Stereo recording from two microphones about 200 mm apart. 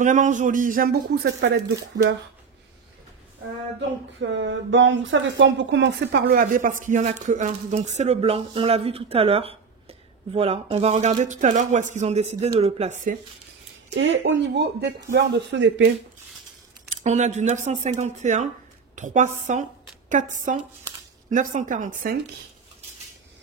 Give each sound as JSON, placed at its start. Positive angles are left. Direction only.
{"t": 0.0, "sound": "speech", "side_deg": -40}
{"t": 4.2, "sound": "speech", "side_deg": -65}
{"t": 6.2, "sound": "speech", "side_deg": -45}
{"t": 13.9, "sound": "speech", "side_deg": -65}
{"t": 17.0, "sound": "speech", "side_deg": -35}